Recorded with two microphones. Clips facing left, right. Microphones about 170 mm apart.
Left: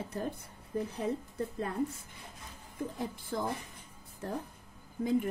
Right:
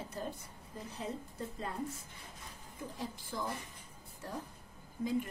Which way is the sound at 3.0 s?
55° left (ahead or behind).